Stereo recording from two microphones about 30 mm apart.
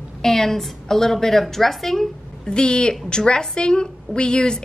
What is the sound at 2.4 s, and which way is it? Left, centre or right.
A woman's voice, left.